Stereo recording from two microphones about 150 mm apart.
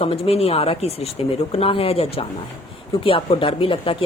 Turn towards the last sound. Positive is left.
turn(degrees=35)  # may be behind; listen again after turning